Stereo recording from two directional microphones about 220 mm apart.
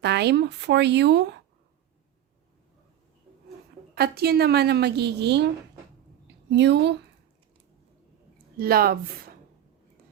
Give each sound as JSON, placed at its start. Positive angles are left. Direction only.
{"t": 0.0, "sound": "a woman's voice", "side_deg": -50}
{"t": 3.9, "sound": "a woman's voice", "side_deg": -45}
{"t": 8.5, "sound": "a woman's voice", "side_deg": -45}